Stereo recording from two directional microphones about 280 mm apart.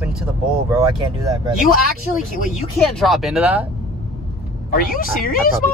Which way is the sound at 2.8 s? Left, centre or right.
Centre.